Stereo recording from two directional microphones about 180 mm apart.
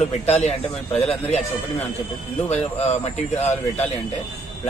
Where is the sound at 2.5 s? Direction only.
40° left (ahead or behind).